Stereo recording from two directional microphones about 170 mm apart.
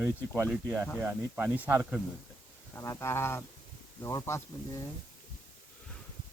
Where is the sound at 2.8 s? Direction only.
15° left (ahead or behind).